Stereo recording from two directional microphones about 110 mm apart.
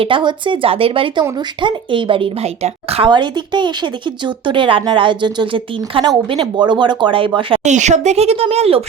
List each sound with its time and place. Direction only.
0.0 s speech: 45° right (ahead or behind); by 3.1 s 70° right (ahead or behind)
3.1 s speech: 45° right (ahead or behind)
7.6 s speech: 90° right; by 8.8 s 65° right (ahead or behind)